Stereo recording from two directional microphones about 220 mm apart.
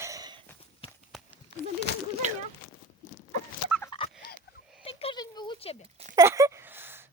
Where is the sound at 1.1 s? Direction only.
Centre (ahead or behind).